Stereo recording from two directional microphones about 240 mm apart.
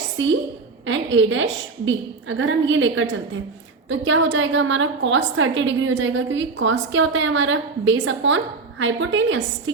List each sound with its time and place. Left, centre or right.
0.2 s a woman's voice: right